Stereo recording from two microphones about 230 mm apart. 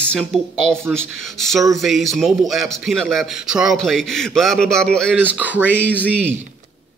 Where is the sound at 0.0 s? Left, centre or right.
Centre.